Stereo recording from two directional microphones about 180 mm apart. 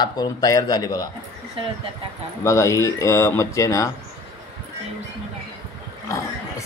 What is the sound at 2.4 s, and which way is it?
Speech, 15° left (ahead or behind).